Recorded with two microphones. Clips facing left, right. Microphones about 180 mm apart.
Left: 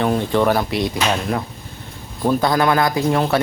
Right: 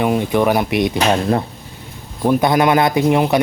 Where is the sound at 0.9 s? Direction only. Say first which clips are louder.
Right 5 dB; 30° right (ahead or behind).